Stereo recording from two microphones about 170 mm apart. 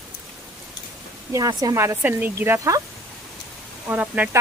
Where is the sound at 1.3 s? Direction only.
20° right (ahead or behind).